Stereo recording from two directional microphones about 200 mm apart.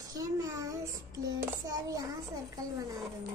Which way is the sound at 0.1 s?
15° right (ahead or behind).